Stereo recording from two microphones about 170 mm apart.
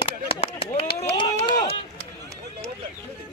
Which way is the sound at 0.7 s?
30° left (ahead or behind).